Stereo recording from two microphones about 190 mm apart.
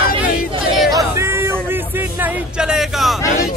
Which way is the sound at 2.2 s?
5° right (ahead or behind).